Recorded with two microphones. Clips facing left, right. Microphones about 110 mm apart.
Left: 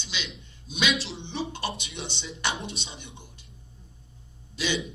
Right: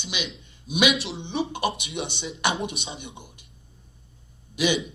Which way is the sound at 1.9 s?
65° right (ahead or behind).